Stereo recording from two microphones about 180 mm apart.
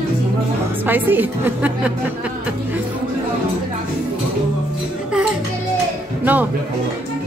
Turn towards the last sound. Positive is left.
turn(degrees=-10)  # may be behind; listen again after turning